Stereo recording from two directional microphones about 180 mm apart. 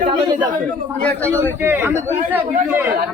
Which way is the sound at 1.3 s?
10° right (ahead or behind).